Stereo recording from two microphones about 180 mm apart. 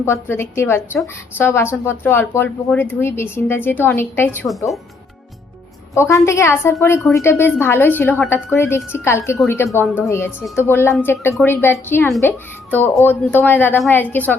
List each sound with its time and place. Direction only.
0.0 s speech: 15° left (ahead or behind)
5.9 s speech: 15° left (ahead or behind)